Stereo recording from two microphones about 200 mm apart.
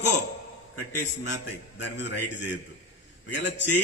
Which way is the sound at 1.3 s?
65° left (ahead or behind).